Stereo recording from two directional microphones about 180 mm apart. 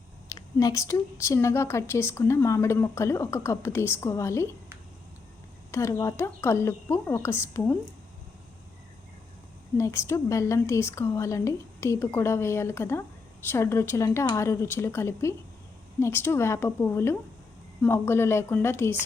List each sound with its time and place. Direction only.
0.3 s a woman's voice: 20° left (ahead or behind)
5.7 s a woman's voice: 15° left (ahead or behind)
9.7 s a woman's voice: 15° left (ahead or behind)